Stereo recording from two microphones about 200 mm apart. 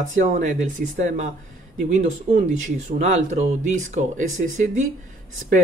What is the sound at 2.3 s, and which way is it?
Speech, 30° right (ahead or behind).